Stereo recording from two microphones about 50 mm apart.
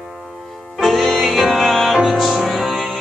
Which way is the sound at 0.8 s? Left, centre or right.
Centre.